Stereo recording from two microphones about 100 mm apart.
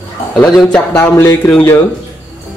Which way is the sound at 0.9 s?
25° left (ahead or behind).